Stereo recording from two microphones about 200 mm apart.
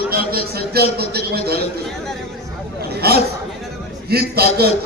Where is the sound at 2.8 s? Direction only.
50° right (ahead or behind).